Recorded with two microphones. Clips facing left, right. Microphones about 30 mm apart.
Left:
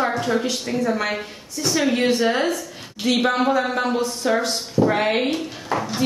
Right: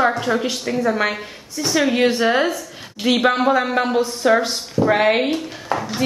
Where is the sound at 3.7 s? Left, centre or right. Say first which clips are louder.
Right 3 dB; centre.